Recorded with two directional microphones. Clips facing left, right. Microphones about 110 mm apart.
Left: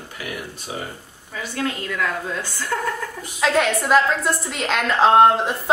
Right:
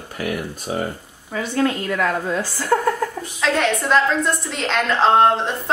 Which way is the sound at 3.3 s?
5° left (ahead or behind).